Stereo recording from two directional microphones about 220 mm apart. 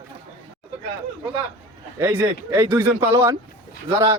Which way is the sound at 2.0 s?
10° right (ahead or behind).